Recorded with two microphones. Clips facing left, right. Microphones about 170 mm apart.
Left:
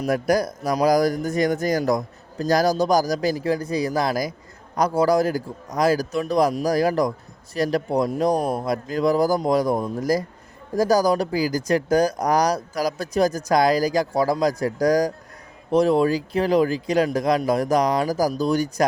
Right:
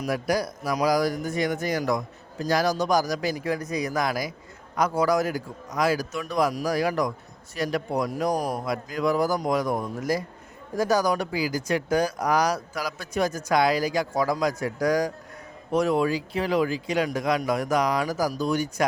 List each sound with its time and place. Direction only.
0.1 s a man's voice: 45° left (ahead or behind)